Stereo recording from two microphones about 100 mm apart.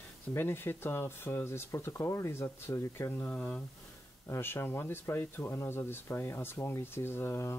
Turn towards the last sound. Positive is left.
turn(degrees=25)  # may be behind; listen again after turning